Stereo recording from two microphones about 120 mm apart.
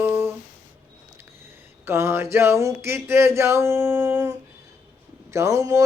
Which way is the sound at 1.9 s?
20° right (ahead or behind).